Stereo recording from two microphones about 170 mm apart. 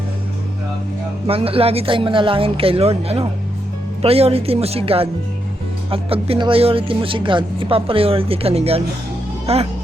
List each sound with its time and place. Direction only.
1.3 s speech: 35° right (ahead or behind)